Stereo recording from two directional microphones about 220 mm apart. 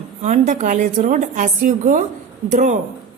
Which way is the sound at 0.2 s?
35° right (ahead or behind).